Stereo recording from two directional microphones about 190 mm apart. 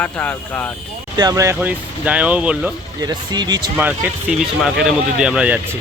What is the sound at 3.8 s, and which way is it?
Speech, 10° right (ahead or behind).